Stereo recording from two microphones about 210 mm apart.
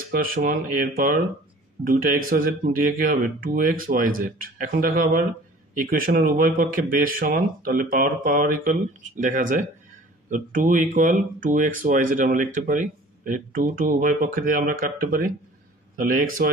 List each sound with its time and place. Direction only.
0.1 s speech: 45° right (ahead or behind)